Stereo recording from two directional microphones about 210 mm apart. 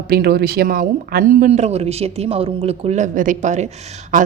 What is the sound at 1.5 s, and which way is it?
Speech, 30° right (ahead or behind).